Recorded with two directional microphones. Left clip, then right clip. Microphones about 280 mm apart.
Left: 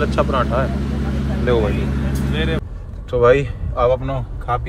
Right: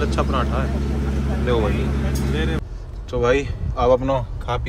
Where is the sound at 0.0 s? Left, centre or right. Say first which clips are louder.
Left 4 dB; centre.